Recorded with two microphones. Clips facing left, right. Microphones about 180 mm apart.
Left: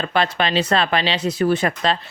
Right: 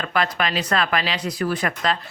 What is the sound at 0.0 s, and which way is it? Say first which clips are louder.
Speech: left 3 dB; 25° left (ahead or behind).